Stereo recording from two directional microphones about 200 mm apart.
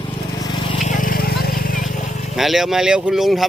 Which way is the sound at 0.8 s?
40° left (ahead or behind).